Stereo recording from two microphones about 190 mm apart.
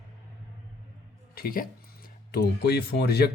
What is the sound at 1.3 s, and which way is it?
Speech, 50° left (ahead or behind).